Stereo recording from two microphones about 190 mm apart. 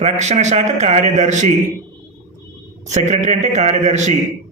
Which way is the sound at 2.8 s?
40° right (ahead or behind).